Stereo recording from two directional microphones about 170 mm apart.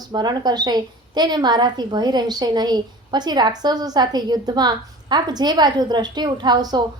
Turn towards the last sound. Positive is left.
turn(degrees=-25)  # may be behind; listen again after turning